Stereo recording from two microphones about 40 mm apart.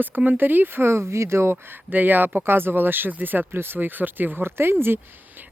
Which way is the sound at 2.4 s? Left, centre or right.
Right.